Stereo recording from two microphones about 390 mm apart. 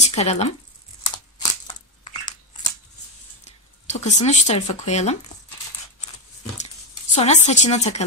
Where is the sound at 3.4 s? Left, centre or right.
Centre.